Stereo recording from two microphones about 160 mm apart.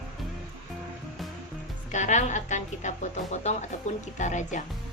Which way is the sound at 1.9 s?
50° left (ahead or behind).